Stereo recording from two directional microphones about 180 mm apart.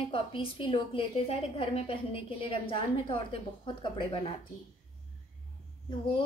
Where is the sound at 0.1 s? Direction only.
30° left (ahead or behind).